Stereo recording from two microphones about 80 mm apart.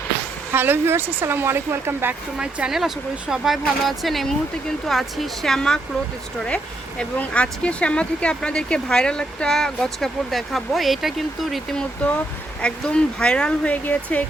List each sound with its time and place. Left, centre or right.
0.5 s speech: right
2.4 s speech: centre
7.0 s speech: centre